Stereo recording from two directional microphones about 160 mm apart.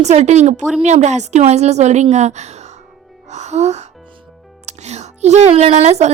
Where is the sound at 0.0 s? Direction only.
45° right (ahead or behind).